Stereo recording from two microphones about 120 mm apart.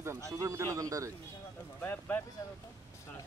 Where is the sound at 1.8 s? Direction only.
15° left (ahead or behind).